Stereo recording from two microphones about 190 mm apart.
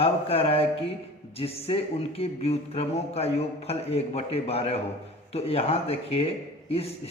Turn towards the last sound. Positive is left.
turn(degrees=30)  # may be behind; listen again after turning